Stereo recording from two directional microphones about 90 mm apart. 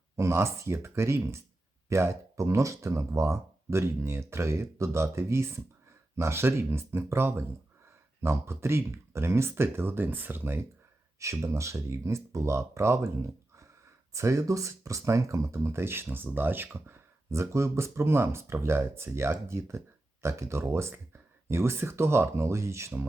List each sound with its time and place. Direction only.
0.2 s speech: 30° right (ahead or behind)
11.2 s speech: 35° right (ahead or behind)
14.1 s speech: 35° right (ahead or behind)